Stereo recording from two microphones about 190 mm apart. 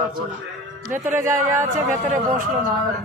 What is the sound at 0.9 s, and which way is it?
Speech, 15° right (ahead or behind).